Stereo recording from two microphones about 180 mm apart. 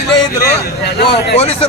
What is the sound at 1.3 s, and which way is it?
Speech, 35° left (ahead or behind).